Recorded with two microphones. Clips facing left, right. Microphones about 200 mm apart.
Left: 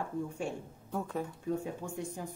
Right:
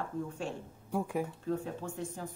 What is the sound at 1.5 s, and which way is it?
Speech, 15° left (ahead or behind).